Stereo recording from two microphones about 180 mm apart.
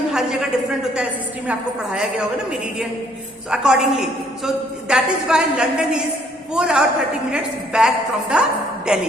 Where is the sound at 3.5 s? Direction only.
5° right (ahead or behind).